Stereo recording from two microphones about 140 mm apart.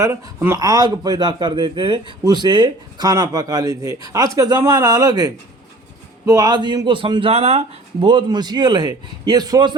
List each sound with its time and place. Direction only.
0.0 s speech: 20° right (ahead or behind)